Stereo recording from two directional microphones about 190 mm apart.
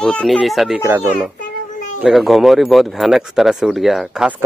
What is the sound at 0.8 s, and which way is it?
Speech, 10° right (ahead or behind).